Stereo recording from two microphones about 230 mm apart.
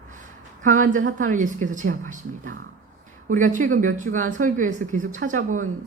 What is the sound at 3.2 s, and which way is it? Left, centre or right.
A woman's voice, right.